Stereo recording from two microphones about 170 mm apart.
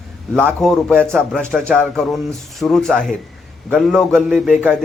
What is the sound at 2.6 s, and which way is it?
A man's voice, centre (ahead or behind).